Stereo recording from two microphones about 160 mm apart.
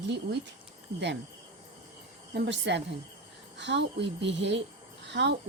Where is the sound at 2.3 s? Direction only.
90° right.